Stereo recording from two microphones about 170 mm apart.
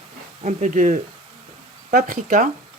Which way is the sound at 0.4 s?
45° right (ahead or behind).